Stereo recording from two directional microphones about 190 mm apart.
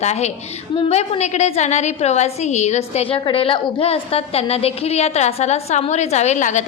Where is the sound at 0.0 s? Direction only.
35° left (ahead or behind).